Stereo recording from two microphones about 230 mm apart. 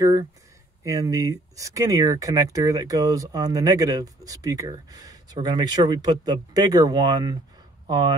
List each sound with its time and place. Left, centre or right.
0.8 s speech: centre